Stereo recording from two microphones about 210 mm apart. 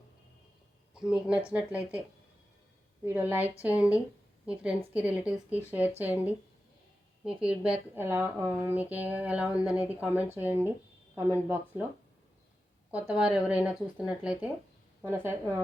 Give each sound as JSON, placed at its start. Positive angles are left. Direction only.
{"t": 0.9, "sound": "a woman's voice", "side_deg": -5}
{"t": 12.9, "sound": "a woman's voice", "side_deg": -5}